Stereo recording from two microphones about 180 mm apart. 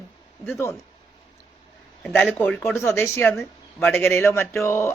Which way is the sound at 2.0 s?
Centre (ahead or behind).